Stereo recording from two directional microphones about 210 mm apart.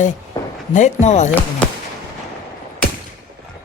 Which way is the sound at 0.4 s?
20° left (ahead or behind).